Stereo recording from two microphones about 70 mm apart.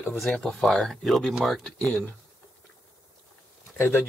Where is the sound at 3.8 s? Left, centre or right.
Left.